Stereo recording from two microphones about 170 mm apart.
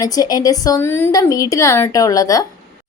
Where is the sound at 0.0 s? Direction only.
20° left (ahead or behind).